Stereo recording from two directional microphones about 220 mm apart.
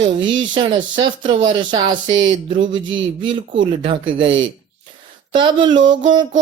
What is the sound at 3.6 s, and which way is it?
Speech, 20° right (ahead or behind).